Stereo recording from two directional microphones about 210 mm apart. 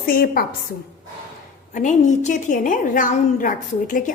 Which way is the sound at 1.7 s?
35° left (ahead or behind).